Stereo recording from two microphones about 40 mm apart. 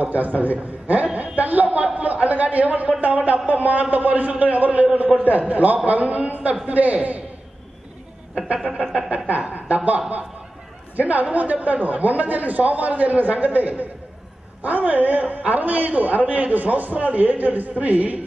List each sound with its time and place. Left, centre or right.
0.0 s a woman's voice: right
8.5 s a sound: centre
9.3 s a man's voice: right